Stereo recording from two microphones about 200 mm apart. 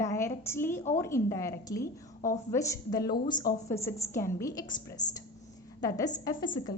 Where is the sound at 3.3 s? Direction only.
45° left (ahead or behind).